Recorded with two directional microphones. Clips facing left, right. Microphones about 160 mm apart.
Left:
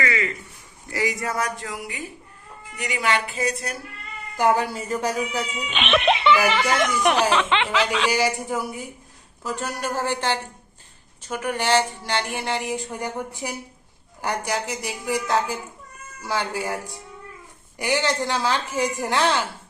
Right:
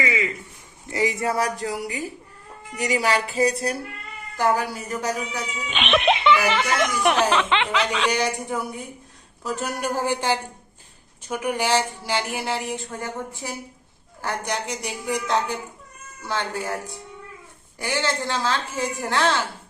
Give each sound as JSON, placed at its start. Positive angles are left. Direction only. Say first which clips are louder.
{"t": 0.0, "sound": "a sound", "louder": "even", "side_deg": -10}
{"t": 0.9, "sound": "speech", "louder": "right 3 dB", "side_deg": -25}
{"t": 4.4, "sound": "speech", "louder": "left 2 dB", "side_deg": 15}
{"t": 4.9, "sound": "speech", "louder": "left 2 dB", "side_deg": 30}
{"t": 5.6, "sound": "speech", "louder": "right 1 dB", "side_deg": 0}
{"t": 9.6, "sound": "speech", "louder": "right 2 dB", "side_deg": -10}
{"t": 12.7, "sound": "a woman's voice", "louder": "left 2 dB", "side_deg": 15}
{"t": 14.5, "sound": "a woman's voice", "louder": "left 1 dB", "side_deg": 5}